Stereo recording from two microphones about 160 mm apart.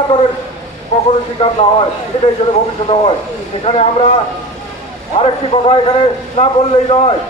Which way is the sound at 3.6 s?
40° left (ahead or behind).